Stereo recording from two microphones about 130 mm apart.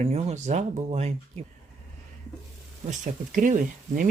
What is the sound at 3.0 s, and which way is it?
Speech, 75° right (ahead or behind).